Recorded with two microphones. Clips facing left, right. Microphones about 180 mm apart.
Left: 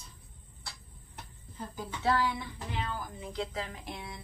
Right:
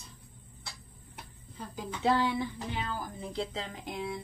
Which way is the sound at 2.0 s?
20° right (ahead or behind).